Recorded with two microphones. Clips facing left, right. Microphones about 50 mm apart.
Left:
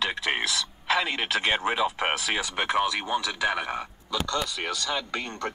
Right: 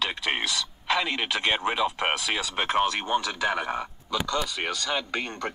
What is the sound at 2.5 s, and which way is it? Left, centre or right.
Speech, right.